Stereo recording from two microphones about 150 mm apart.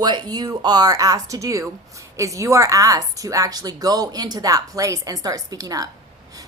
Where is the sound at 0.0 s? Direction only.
30° right (ahead or behind).